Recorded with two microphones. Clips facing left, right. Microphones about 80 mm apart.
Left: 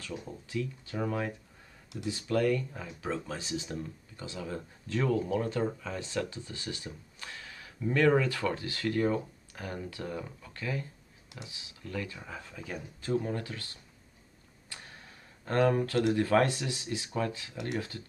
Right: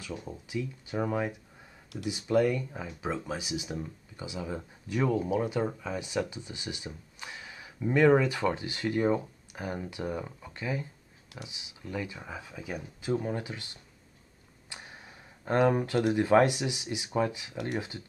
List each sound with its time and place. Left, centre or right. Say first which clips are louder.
0.1 s speech: right 1 dB; centre